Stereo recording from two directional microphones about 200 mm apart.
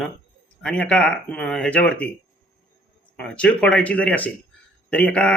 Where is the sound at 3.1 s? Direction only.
5° left (ahead or behind).